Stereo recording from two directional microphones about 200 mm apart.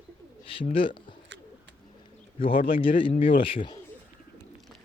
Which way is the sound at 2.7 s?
25° left (ahead or behind).